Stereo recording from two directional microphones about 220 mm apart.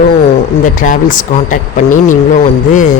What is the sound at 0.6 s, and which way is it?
Speech, 40° left (ahead or behind).